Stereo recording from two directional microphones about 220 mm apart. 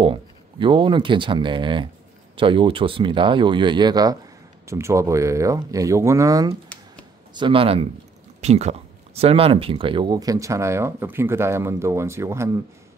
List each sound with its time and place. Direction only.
0.0 s speech: 25° right (ahead or behind)